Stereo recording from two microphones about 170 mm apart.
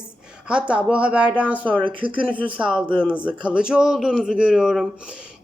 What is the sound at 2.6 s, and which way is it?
A woman's voice, 5° right (ahead or behind).